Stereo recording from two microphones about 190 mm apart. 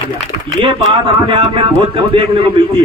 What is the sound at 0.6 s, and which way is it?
A man's voice, 25° right (ahead or behind).